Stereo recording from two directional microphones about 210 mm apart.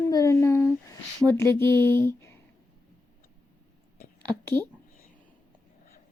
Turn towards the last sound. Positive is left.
turn(degrees=10)  # may be behind; listen again after turning